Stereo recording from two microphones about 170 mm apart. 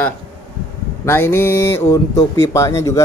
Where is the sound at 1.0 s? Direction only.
15° left (ahead or behind).